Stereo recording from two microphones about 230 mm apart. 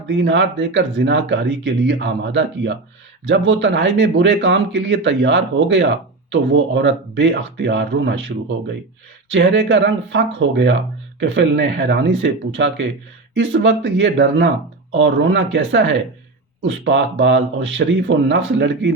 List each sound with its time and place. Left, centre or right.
0.1 s speech: right